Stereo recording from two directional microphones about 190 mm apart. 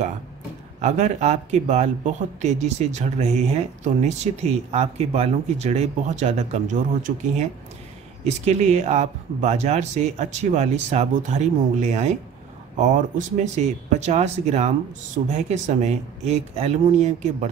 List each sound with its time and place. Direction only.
0.7 s speech: 35° right (ahead or behind)